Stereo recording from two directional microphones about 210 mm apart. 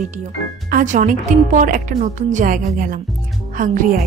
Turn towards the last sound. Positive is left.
turn(degrees=-40)  # may be behind; listen again after turning